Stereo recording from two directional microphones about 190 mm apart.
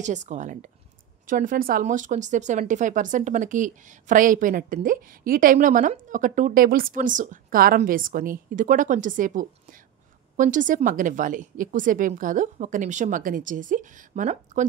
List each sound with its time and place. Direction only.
0.0 s speech: 40° right (ahead or behind)